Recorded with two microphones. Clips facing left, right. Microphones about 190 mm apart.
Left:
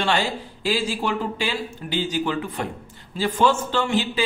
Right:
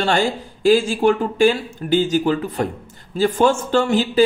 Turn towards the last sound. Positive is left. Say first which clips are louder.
# right 7 dB
turn(degrees=-40)  # may be behind; listen again after turning